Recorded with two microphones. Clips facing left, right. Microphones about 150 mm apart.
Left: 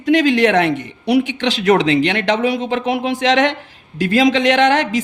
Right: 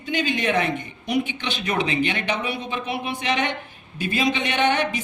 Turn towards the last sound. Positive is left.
turn(degrees=90)